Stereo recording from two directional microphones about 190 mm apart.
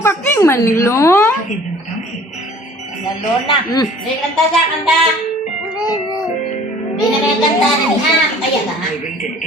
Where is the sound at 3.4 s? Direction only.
20° left (ahead or behind).